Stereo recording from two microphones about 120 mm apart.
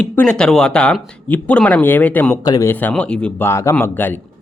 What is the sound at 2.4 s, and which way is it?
Speech, 30° left (ahead or behind).